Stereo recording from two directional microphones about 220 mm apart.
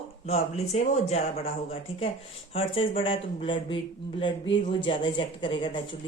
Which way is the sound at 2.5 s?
25° left (ahead or behind).